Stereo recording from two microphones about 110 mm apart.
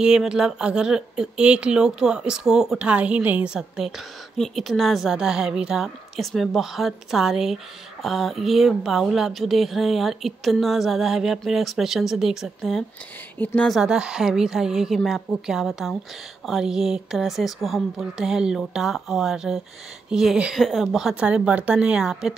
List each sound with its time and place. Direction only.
0.0 s a woman's voice: 5° right (ahead or behind)
13.4 s speech: 15° left (ahead or behind)
13.7 s a woman's voice: 5° right (ahead or behind)